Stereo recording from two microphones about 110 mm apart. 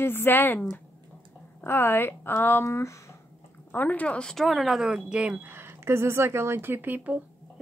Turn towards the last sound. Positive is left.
turn(degrees=-15)  # may be behind; listen again after turning